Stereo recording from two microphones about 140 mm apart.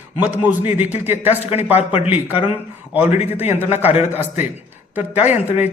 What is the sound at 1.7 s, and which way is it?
Speech, 50° left (ahead or behind).